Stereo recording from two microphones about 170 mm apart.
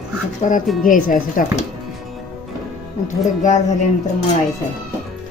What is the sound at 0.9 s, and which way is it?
Speech, 50° left (ahead or behind).